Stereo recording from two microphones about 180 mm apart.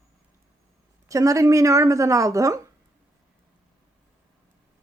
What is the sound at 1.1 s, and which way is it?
Speech, 20° right (ahead or behind).